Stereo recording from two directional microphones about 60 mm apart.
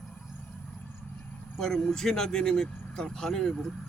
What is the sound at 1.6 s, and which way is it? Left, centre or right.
Speech, centre.